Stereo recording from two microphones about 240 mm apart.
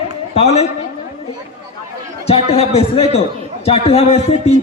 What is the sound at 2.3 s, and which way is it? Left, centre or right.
A man's voice, left.